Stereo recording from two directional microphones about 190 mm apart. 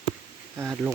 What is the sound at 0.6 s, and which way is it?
Speech, 10° right (ahead or behind).